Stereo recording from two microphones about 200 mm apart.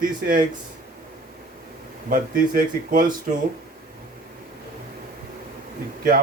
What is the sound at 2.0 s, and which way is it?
Speech, 45° right (ahead or behind).